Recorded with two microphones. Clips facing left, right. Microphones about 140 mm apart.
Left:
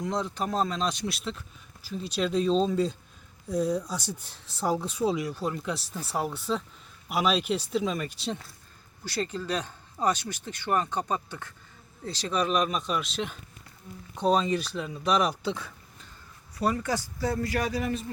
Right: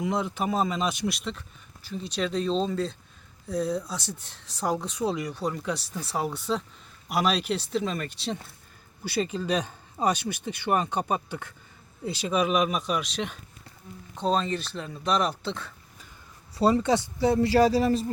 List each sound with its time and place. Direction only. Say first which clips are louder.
0.0 s speech: right 2 dB; 10° right (ahead or behind)
9.0 s speech: right 4 dB; 10° right (ahead or behind); by 15.7 s 10° left (ahead or behind)
16.6 s speech: right 6 dB; 25° right (ahead or behind)